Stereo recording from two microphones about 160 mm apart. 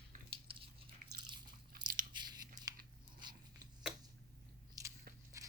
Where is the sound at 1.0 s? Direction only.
60° right (ahead or behind).